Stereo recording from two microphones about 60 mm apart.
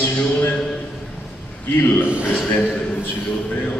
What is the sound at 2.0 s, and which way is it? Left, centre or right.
Speech, centre.